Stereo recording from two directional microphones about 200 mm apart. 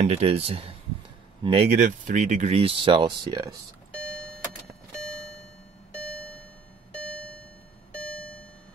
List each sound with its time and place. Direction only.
0.0 s speech: 30° right (ahead or behind)
7.0 s music: 5° left (ahead or behind)